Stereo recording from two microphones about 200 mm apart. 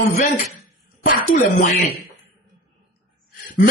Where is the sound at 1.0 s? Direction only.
40° left (ahead or behind).